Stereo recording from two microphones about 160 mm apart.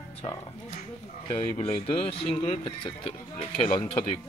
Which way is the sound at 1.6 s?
35° left (ahead or behind).